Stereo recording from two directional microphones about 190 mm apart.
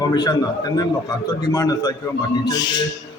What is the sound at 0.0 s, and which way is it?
Speech, 20° left (ahead or behind).